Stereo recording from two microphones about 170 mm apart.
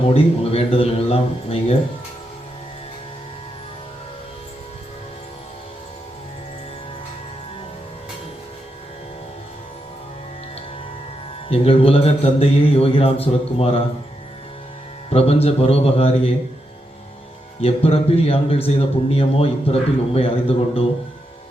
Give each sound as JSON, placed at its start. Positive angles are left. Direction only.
{"t": 0.1, "sound": "a man's voice", "side_deg": 35}
{"t": 11.4, "sound": "a man's voice", "side_deg": 35}
{"t": 15.1, "sound": "a man's voice", "side_deg": 35}
{"t": 17.6, "sound": "a man's voice", "side_deg": 35}